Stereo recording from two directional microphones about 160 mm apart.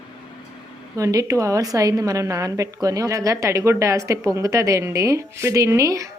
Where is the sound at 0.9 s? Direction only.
20° right (ahead or behind).